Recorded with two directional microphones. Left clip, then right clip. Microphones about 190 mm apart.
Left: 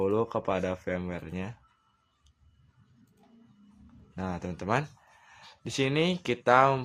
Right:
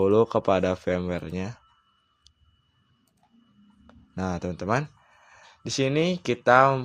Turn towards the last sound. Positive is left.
turn(degrees=-20)  # may be behind; listen again after turning